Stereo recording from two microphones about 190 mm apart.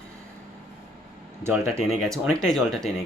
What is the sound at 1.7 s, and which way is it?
Speech, centre (ahead or behind).